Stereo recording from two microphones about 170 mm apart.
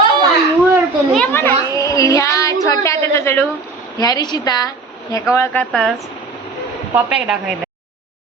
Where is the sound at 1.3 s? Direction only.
15° left (ahead or behind).